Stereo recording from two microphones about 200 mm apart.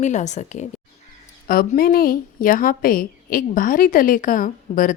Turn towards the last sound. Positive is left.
turn(degrees=40)  # may be behind; listen again after turning